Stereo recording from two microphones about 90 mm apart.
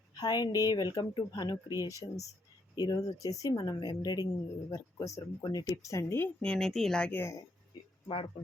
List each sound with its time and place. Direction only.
0.2 s speech: 50° left (ahead or behind)
3.8 s speech: 50° left (ahead or behind)
4.7 s speech: 40° left (ahead or behind)
6.4 s a woman's voice: 5° left (ahead or behind)
7.1 s speech: 25° left (ahead or behind)
8.0 s speech: 90° left